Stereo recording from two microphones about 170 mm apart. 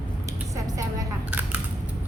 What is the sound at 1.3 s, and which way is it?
Camera, 10° right (ahead or behind).